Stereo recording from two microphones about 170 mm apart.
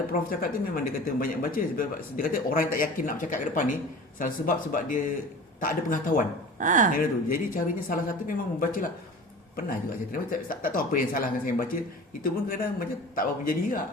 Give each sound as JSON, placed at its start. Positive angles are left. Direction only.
{"t": 0.1, "sound": "speech", "side_deg": 55}
{"t": 6.6, "sound": "speech", "side_deg": -50}
{"t": 6.9, "sound": "speech", "side_deg": 55}